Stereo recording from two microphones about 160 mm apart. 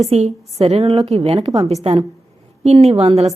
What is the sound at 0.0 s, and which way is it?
A woman's voice, 40° right (ahead or behind).